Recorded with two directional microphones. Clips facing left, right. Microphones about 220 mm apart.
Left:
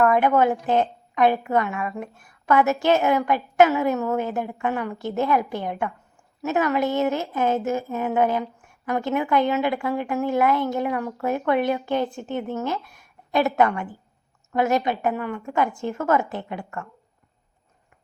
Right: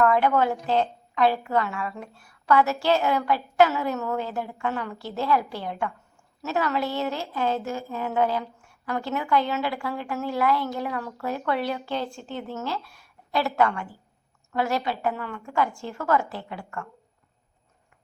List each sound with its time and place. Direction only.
0.0 s a woman's voice: 20° left (ahead or behind)